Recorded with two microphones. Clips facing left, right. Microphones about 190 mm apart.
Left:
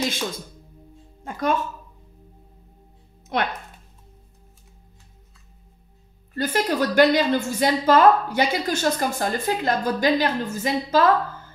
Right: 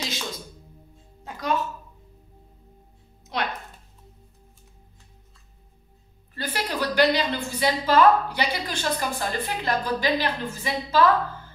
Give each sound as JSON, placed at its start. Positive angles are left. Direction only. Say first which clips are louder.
{"t": 1.2, "sound": "a woman's voice", "louder": "left 7 dB", "side_deg": 50}
{"t": 3.3, "sound": "a woman's voice", "louder": "left 4 dB", "side_deg": 55}
{"t": 6.3, "sound": "a woman's voice", "louder": "left 7 dB", "side_deg": 45}